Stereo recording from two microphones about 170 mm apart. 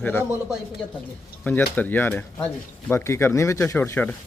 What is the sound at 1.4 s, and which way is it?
Speech, 10° left (ahead or behind).